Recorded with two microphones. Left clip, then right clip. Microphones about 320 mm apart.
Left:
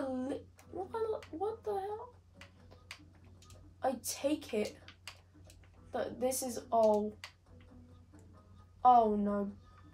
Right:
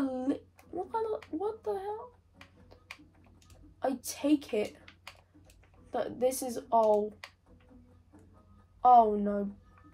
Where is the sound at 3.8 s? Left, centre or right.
Right.